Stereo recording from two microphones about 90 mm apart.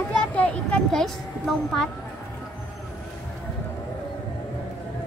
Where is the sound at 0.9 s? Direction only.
5° left (ahead or behind).